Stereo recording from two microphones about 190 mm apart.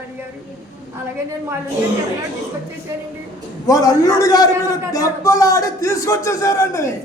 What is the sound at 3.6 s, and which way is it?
A man's voice, 20° left (ahead or behind).